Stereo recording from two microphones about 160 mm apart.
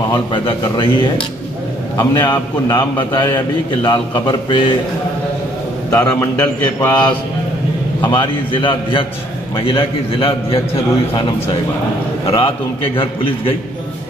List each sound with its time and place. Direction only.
0.1 s a man's voice: 30° left (ahead or behind)
5.9 s a man's voice: 15° left (ahead or behind)
8.1 s a man's voice: 30° left (ahead or behind)
12.3 s a man's voice: 35° left (ahead or behind)